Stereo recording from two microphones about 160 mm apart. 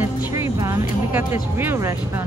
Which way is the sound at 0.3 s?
20° right (ahead or behind).